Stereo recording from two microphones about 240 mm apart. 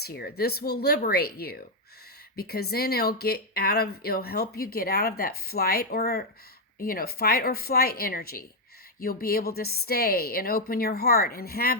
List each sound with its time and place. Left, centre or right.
0.0 s speech: left